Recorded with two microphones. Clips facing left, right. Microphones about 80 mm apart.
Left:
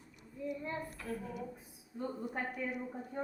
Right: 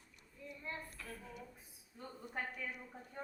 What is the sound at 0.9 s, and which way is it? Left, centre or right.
A woman's voice, left.